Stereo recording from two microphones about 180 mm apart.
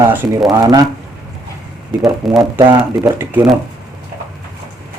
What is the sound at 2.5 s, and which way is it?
Speech, 20° right (ahead or behind).